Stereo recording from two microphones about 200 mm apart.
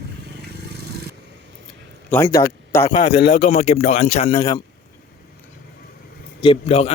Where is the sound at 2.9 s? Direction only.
25° left (ahead or behind).